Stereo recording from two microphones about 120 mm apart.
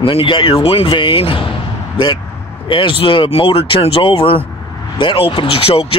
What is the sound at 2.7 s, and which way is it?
Speech, 45° left (ahead or behind).